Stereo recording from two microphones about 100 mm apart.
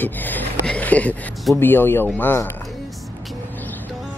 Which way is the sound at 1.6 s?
20° left (ahead or behind).